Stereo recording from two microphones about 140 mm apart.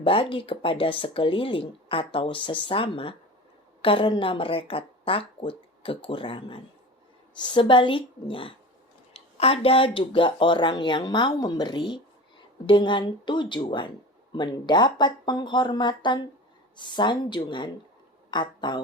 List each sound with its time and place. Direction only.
0.0 s speech: 40° left (ahead or behind)